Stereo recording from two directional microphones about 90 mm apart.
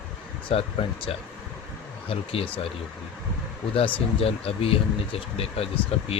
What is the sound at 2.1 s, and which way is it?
Speech, 90° left.